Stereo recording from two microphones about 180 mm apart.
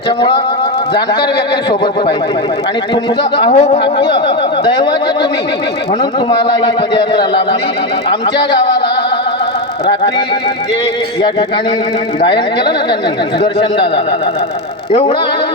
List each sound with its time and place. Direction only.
2.9 s a man's voice: 30° left (ahead or behind)
9.9 s a man's voice: 25° left (ahead or behind)
12.2 s a man's voice: 25° left (ahead or behind)